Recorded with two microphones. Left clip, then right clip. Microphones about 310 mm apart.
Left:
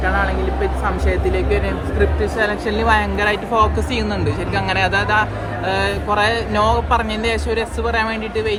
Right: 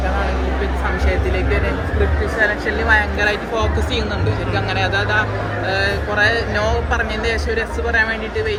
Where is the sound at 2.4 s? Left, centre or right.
Left.